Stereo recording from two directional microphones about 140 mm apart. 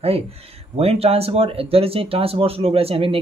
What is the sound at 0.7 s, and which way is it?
Speech, 45° right (ahead or behind).